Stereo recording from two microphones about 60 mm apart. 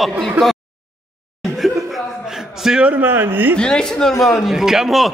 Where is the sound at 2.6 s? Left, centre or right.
Centre.